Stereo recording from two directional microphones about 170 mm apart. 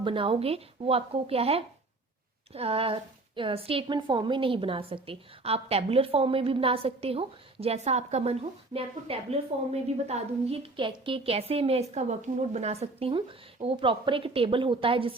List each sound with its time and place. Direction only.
0.0 s a woman's voice: 30° right (ahead or behind)